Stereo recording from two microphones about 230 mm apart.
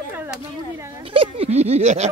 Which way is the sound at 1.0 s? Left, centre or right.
Right.